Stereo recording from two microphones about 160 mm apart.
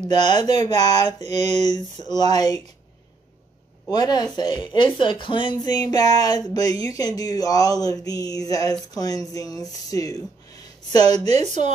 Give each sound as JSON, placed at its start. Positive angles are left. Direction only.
{"t": 0.1, "sound": "speech", "side_deg": 25}
{"t": 0.4, "sound": "a woman's voice", "side_deg": -40}
{"t": 0.7, "sound": "speech", "side_deg": 25}
{"t": 1.2, "sound": "a woman's voice", "side_deg": -45}
{"t": 1.7, "sound": "speech", "side_deg": 25}
{"t": 3.9, "sound": "speech", "side_deg": 25}
{"t": 11.1, "sound": "a woman's voice", "side_deg": -40}